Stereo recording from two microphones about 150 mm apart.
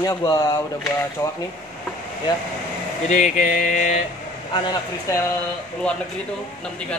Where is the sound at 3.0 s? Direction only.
55° left (ahead or behind).